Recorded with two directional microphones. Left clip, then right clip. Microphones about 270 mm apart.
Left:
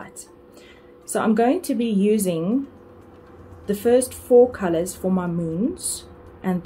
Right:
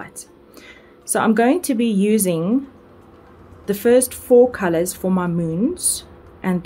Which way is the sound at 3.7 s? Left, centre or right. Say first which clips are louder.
Right 3 dB; right.